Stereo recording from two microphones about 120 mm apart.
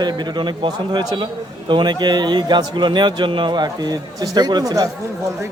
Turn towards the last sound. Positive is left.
turn(degrees=-25)  # may be behind; listen again after turning